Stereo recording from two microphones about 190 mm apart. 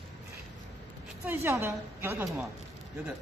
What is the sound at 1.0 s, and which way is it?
A woman's voice, 10° right (ahead or behind).